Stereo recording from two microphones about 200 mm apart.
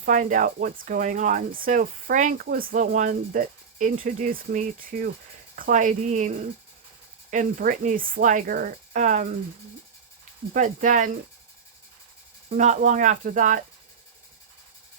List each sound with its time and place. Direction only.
0.0 s speech: 40° right (ahead or behind)
10.5 s speech: 40° right (ahead or behind)
12.5 s speech: 40° right (ahead or behind)